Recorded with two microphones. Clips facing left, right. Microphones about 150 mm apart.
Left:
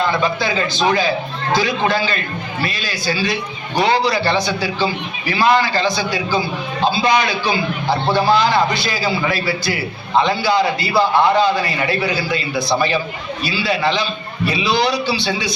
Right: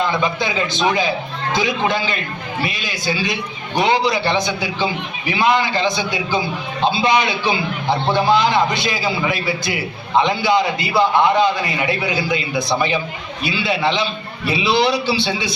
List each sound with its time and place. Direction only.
0.0 s a man's voice: 20° right (ahead or behind)